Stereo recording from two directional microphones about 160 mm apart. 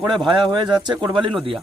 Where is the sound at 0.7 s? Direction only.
25° right (ahead or behind).